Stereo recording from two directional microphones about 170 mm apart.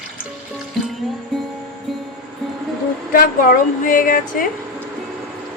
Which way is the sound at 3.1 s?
55° left (ahead or behind).